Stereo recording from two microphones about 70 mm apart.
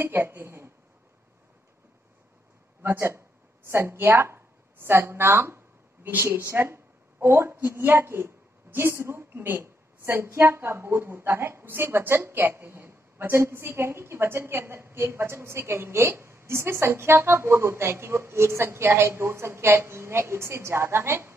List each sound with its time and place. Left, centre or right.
0.0 s speech: right
2.8 s a woman's voice: right